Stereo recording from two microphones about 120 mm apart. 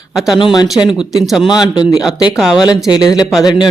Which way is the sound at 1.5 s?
35° left (ahead or behind).